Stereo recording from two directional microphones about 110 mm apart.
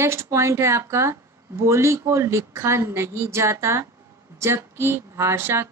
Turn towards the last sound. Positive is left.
turn(degrees=-25)  # may be behind; listen again after turning